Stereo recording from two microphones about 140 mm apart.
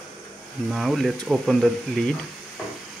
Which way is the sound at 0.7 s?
Centre (ahead or behind).